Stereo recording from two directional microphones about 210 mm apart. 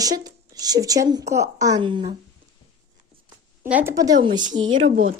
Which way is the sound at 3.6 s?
10° right (ahead or behind).